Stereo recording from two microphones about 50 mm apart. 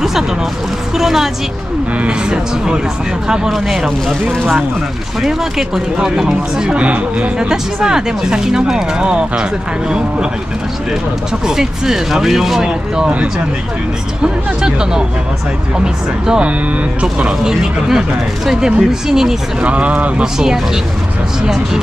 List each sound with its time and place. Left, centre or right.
0.9 s speech: centre
2.0 s speech: centre
5.2 s speech: centre; by 7.2 s right
7.3 s speech: centre
11.4 s speech: centre
17.4 s speech: centre
19.6 s speech: right
20.3 s speech: centre